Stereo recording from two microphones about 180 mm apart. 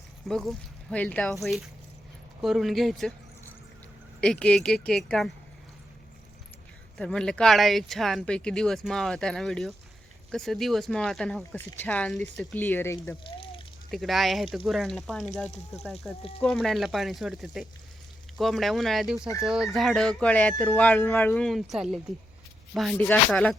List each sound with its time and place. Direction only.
0.3 s speech: centre (ahead or behind)
4.2 s speech: 5° left (ahead or behind)
6.9 s speech: 5° left (ahead or behind)
12.6 s speech: 10° left (ahead or behind)
13.2 s a sound: 30° left (ahead or behind)
13.9 s speech: centre (ahead or behind)
15.4 s speech: 40° left (ahead or behind)
15.8 s speech: centre (ahead or behind)